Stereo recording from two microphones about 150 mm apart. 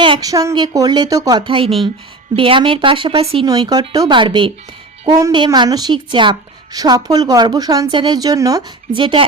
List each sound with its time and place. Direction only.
0.0 s a woman's voice: 30° right (ahead or behind)
8.9 s a woman's voice: 35° right (ahead or behind)